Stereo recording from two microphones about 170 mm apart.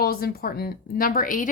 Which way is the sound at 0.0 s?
65° left (ahead or behind).